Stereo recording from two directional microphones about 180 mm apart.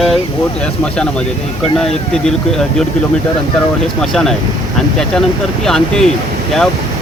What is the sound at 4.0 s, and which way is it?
Speech, centre (ahead or behind).